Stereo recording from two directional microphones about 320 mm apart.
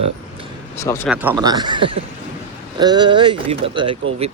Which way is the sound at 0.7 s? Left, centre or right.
Centre.